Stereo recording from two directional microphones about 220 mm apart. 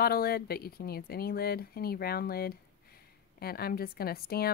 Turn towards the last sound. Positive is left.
turn(degrees=45)  # may be behind; listen again after turning